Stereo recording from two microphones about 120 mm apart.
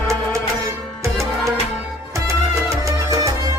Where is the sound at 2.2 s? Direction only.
25° right (ahead or behind).